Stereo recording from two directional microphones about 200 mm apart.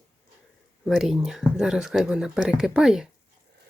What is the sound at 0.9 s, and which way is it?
Speech, centre (ahead or behind).